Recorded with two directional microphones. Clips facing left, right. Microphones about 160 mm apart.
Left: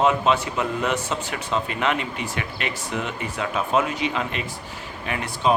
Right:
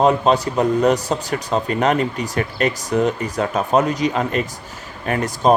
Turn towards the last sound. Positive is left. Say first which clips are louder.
# right 6 dB
turn(degrees=-40)  # may be behind; listen again after turning